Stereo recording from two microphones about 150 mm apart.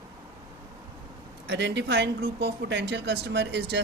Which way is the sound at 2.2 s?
90° right.